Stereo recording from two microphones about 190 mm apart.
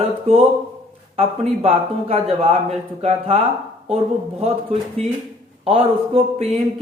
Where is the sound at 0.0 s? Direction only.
30° right (ahead or behind).